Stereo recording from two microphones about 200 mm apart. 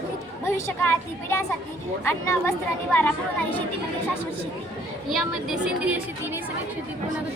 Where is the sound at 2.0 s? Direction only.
15° left (ahead or behind).